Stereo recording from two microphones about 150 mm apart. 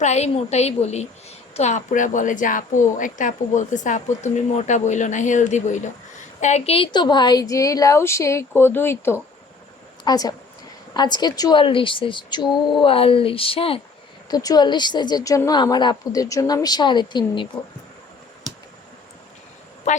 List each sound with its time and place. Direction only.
0.0 s a woman's voice: 50° left (ahead or behind)
14.3 s a woman's voice: 25° left (ahead or behind)
19.9 s speech: 50° left (ahead or behind)